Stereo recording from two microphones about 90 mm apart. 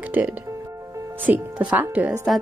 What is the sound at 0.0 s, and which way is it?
Speech, 20° right (ahead or behind).